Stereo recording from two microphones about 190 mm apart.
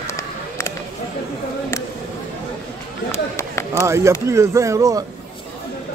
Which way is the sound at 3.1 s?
15° left (ahead or behind).